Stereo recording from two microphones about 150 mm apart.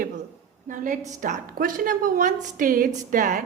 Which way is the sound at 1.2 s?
65° right (ahead or behind).